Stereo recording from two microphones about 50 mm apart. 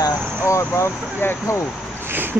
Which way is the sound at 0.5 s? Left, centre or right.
Left.